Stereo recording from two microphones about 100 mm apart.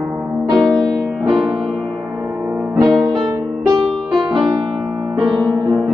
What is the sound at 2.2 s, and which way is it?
Music, 15° right (ahead or behind).